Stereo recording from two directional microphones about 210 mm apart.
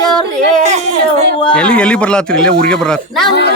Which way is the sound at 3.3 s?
55° left (ahead or behind).